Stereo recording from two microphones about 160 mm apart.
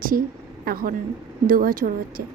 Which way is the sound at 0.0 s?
60° right (ahead or behind).